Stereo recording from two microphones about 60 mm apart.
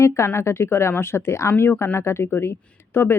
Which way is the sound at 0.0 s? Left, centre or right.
Left.